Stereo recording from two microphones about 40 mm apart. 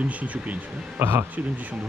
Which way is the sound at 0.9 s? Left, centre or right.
Right.